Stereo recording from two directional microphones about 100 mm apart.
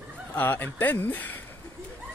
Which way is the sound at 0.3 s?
20° left (ahead or behind).